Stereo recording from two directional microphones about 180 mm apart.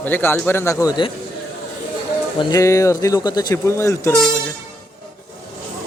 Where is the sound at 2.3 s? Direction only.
20° left (ahead or behind).